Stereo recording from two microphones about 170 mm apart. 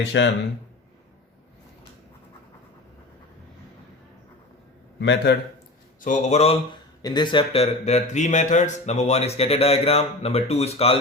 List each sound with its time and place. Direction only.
0.1 s a man's voice: 90° left
4.9 s a man's voice: 90° left
6.1 s speech: 40° left (ahead or behind)
7.0 s speech: 25° left (ahead or behind)